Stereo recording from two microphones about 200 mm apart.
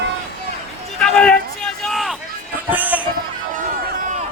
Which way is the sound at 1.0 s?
5° left (ahead or behind).